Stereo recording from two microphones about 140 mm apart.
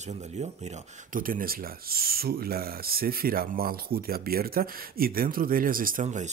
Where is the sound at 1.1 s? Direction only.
85° right.